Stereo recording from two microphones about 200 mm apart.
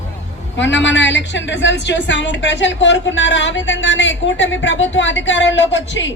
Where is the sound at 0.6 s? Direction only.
65° left (ahead or behind).